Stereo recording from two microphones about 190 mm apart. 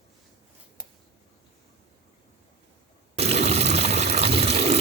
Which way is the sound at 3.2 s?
35° right (ahead or behind).